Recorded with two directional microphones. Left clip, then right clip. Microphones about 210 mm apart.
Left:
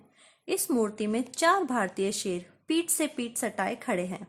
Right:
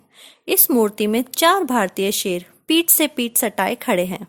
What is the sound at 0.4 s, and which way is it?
Speech, 40° right (ahead or behind).